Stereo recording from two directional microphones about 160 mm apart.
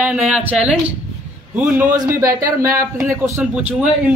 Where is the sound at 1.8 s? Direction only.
55° right (ahead or behind).